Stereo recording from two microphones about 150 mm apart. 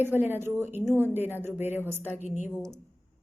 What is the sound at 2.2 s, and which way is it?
Speech, 50° left (ahead or behind).